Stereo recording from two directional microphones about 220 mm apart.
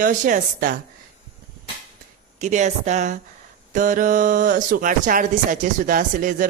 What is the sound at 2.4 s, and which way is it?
Speech, 30° right (ahead or behind).